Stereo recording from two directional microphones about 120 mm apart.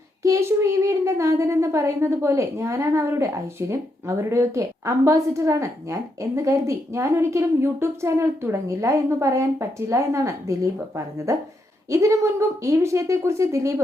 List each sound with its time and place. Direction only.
0.2 s a woman's voice: 25° right (ahead or behind)